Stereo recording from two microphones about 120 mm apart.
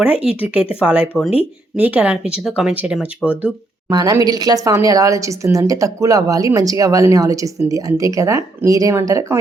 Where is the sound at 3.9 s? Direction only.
30° right (ahead or behind).